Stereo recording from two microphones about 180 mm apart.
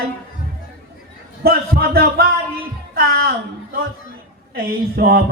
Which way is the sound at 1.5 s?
60° right (ahead or behind).